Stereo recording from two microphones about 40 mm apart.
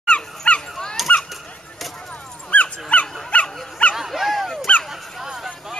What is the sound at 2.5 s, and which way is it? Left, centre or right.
Dog, left.